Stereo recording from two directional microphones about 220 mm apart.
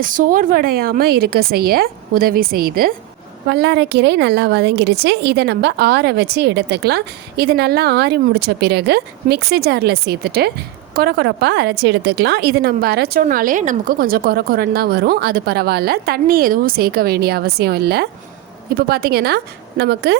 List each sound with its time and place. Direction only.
0.0 s a woman's voice: 40° right (ahead or behind)